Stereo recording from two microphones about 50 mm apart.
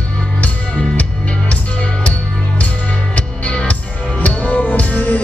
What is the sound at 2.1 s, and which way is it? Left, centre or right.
Music, left.